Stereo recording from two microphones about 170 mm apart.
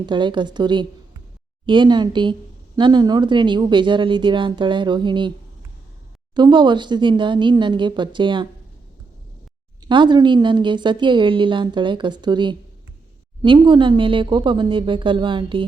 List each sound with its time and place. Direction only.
0.0 s a woman's voice: 25° right (ahead or behind)
6.3 s a woman's voice: 25° right (ahead or behind)
9.8 s a woman's voice: 25° right (ahead or behind)